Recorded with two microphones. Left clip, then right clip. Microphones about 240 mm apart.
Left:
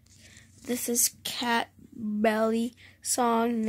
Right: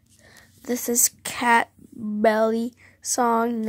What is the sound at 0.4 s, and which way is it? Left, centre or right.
Speech, centre.